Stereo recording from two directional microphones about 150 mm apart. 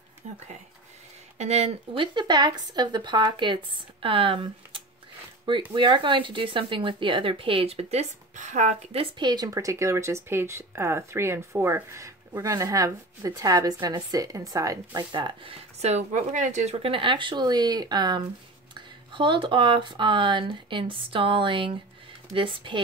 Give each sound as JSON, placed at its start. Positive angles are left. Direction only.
{"t": 0.2, "sound": "speech", "side_deg": -50}